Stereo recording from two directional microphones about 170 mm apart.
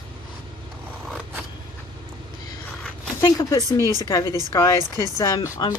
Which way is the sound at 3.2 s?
25° left (ahead or behind).